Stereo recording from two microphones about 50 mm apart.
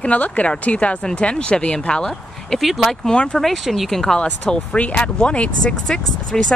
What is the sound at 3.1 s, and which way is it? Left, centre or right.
Speech, centre.